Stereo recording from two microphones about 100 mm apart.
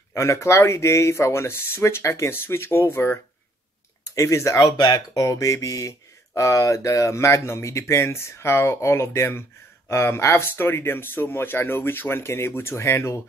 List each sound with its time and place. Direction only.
0.1 s speech: 30° left (ahead or behind)
4.7 s speech: 40° left (ahead or behind)